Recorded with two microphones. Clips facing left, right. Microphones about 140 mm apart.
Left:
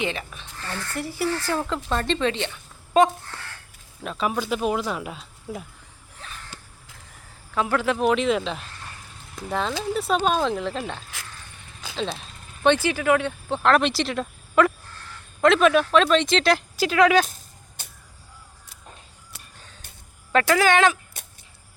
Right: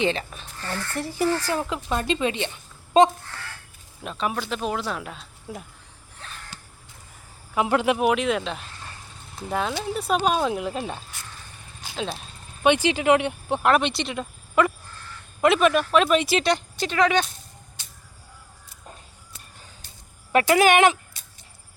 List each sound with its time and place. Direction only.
0.0 s speech: 30° right (ahead or behind)
1.4 s speech: 15° right (ahead or behind)
4.0 s speech: centre (ahead or behind)
7.5 s speech: 20° right (ahead or behind)
8.0 s speech: 5° right (ahead or behind)
12.6 s speech: 15° right (ahead or behind); by 17.2 s 5° left (ahead or behind)
17.8 s a sound: 50° left (ahead or behind)
20.3 s speech: 15° right (ahead or behind)